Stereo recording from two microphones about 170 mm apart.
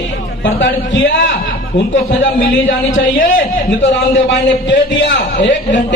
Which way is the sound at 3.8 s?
90° left.